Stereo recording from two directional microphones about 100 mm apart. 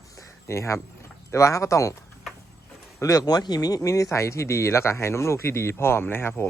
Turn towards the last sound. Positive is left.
turn(degrees=20)  # may be behind; listen again after turning